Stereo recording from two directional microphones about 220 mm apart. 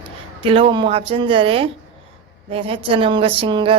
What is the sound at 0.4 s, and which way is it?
Speech, 25° right (ahead or behind).